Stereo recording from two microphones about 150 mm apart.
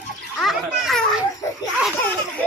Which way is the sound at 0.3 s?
Centre (ahead or behind).